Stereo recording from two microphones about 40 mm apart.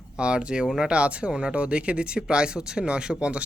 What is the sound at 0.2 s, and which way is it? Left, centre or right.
Speech, right.